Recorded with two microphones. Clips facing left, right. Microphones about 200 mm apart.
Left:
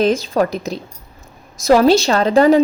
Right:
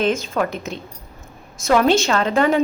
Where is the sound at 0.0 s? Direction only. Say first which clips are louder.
Left 5 dB; 35° left (ahead or behind).